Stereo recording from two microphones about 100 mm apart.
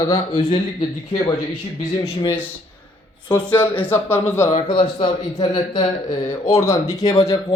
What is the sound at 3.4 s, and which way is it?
Mantra, 15° left (ahead or behind).